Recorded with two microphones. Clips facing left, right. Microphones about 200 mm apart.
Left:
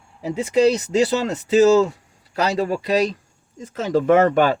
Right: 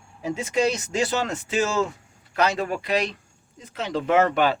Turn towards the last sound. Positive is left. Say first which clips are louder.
# left 5 dB
turn(degrees=45)  # may be behind; listen again after turning